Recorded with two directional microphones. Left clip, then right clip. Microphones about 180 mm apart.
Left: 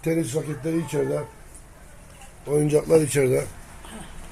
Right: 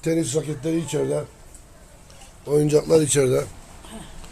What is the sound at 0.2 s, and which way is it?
Speech, 15° right (ahead or behind).